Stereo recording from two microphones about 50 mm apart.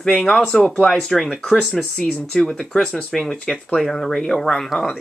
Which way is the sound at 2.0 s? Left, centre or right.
Left.